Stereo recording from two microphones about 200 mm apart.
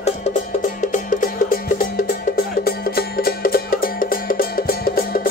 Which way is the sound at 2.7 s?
50° left (ahead or behind).